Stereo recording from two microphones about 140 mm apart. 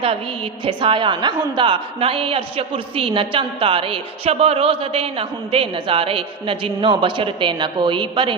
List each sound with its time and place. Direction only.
0.6 s a woman's voice: 35° right (ahead or behind)